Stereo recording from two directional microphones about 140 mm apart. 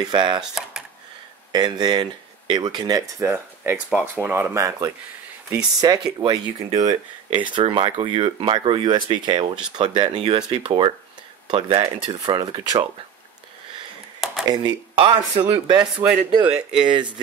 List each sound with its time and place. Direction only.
0.0 s speech: 35° right (ahead or behind)
0.4 s a sound: 5° right (ahead or behind)
1.5 s speech: 30° right (ahead or behind)
3.2 s speech: 20° right (ahead or behind)
7.5 s speech: 35° right (ahead or behind)
14.5 s speech: 35° right (ahead or behind)
16.0 s speech: 10° right (ahead or behind)